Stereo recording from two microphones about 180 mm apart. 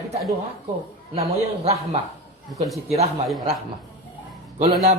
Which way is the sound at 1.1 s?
35° right (ahead or behind).